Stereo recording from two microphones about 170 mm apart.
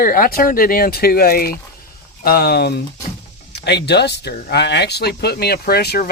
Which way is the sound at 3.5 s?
80° left.